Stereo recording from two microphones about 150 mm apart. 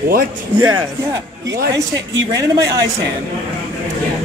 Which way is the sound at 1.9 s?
25° right (ahead or behind).